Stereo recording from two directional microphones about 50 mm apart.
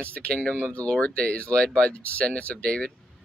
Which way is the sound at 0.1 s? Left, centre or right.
Left.